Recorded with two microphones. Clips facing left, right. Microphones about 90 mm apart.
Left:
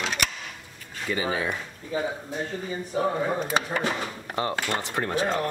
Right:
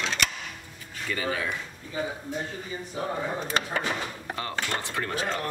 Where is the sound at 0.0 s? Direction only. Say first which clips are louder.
Left 1 dB; 15° left (ahead or behind).